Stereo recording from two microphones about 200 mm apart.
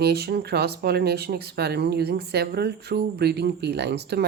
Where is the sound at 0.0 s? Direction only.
50° right (ahead or behind).